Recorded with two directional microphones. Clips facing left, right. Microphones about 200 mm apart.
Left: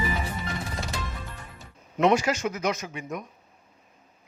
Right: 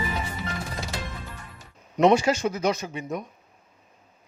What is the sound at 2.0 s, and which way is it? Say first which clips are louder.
Speech: right 3 dB; 30° right (ahead or behind).